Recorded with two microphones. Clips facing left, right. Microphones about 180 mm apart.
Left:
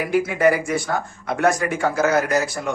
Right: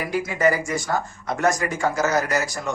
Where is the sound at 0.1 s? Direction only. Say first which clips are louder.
Left 3 dB; 60° left (ahead or behind).